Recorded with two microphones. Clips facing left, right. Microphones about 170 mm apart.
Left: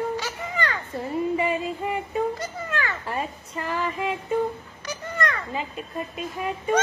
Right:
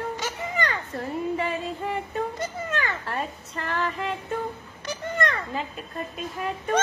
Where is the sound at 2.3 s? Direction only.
20° right (ahead or behind).